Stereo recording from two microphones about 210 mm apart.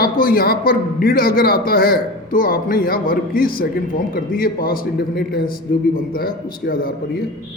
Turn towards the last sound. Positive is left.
turn(degrees=45)  # may be behind; listen again after turning